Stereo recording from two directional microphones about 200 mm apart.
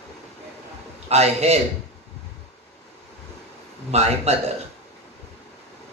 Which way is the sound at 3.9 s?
30° right (ahead or behind).